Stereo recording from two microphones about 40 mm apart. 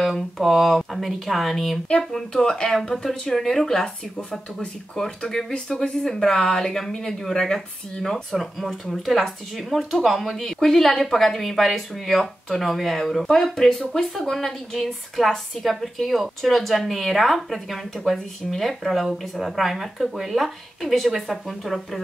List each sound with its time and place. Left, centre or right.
0.0 s speech: centre
2.1 s speech: centre